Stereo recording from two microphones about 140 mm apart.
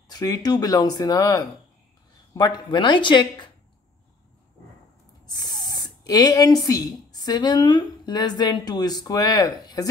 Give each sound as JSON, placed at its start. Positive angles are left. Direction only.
{"t": 0.1, "sound": "speech", "side_deg": 25}
{"t": 5.2, "sound": "speech", "side_deg": 30}